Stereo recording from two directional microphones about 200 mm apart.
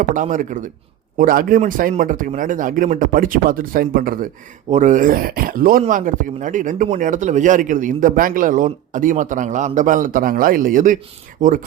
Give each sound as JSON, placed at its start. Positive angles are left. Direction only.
{"t": 0.1, "sound": "a man's voice", "side_deg": -40}